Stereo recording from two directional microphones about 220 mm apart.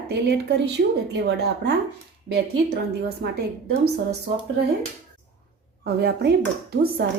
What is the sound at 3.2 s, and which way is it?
Speech, 50° right (ahead or behind).